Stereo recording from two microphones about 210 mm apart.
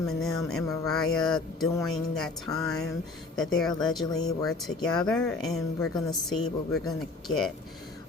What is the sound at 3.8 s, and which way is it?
Speech, centre (ahead or behind).